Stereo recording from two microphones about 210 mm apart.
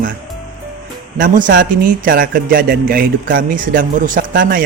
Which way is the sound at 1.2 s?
40° right (ahead or behind).